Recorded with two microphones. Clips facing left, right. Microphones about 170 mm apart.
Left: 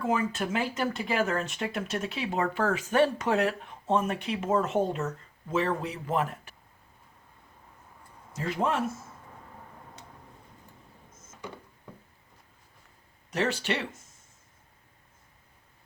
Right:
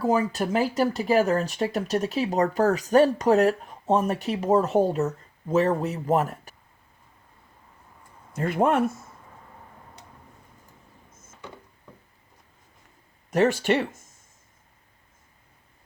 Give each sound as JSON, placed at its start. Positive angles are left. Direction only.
{"t": 0.0, "sound": "speech", "side_deg": -35}
{"t": 8.3, "sound": "speech", "side_deg": -55}
{"t": 13.3, "sound": "speech", "side_deg": -50}